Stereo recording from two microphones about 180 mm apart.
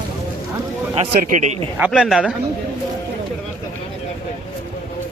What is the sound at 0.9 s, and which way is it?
Speech, 40° right (ahead or behind).